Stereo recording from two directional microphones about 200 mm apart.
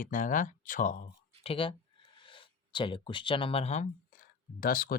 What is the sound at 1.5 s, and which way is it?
Speech, 25° left (ahead or behind).